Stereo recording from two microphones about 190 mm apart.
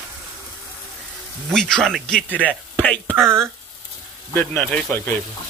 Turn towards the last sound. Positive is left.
turn(degrees=5)  # may be behind; listen again after turning